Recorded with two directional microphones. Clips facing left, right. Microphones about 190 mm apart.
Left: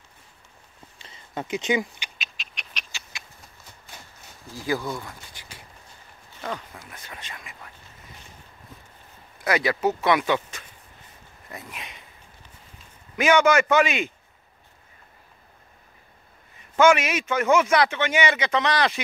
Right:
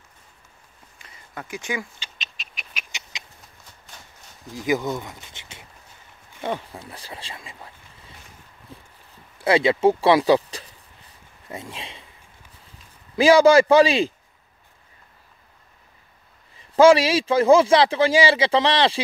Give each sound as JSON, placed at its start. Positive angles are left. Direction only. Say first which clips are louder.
{"t": 1.0, "sound": "a sound", "louder": "left 5 dB", "side_deg": 25}
{"t": 2.1, "sound": "cat", "louder": "even", "side_deg": 0}
{"t": 2.9, "sound": "bird", "louder": "right 2 dB", "side_deg": -20}
{"t": 4.5, "sound": "speech", "louder": "right 4 dB", "side_deg": -20}
{"t": 8.7, "sound": "a sound", "louder": "right 5 dB", "side_deg": -30}
{"t": 9.4, "sound": "speech", "louder": "right 6 dB", "side_deg": -25}
{"t": 13.1, "sound": "a man's voice", "louder": "right 6 dB", "side_deg": -30}
{"t": 16.5, "sound": "a man's voice", "louder": "right 5 dB", "side_deg": -30}